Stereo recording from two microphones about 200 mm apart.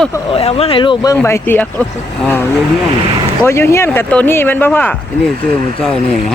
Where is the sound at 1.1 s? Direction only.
10° left (ahead or behind).